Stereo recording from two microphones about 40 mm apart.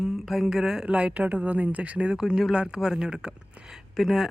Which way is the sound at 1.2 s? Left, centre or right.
Right.